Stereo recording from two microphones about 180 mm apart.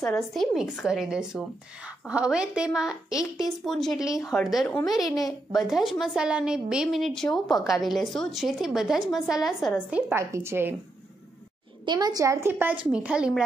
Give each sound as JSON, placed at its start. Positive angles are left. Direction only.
{"t": 0.3, "sound": "a woman's voice", "side_deg": 0}
{"t": 4.0, "sound": "a woman's voice", "side_deg": 20}
{"t": 4.3, "sound": "a woman's voice", "side_deg": 0}
{"t": 11.8, "sound": "a woman's voice", "side_deg": -25}